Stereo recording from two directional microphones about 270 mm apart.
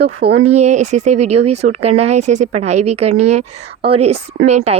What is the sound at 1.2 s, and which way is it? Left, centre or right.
Speech, right.